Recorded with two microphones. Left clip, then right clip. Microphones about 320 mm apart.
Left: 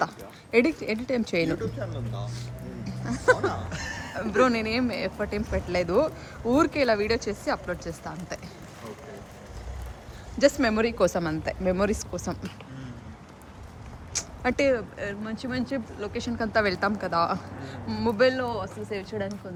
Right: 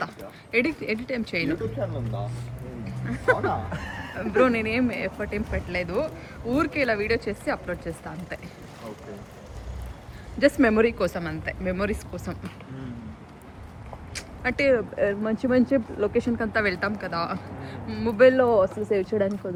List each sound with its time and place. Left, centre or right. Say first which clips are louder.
0.5 s speech: left 1 dB; centre
2.8 s a sound: left 1 dB; centre
3.4 s music: right 2 dB; right
4.2 s speech: right 2 dB; centre
10.3 s speech: right 2 dB; centre
14.1 s speech: left 1 dB; centre